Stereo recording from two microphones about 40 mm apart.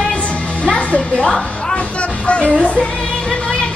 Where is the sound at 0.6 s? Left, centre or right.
Left.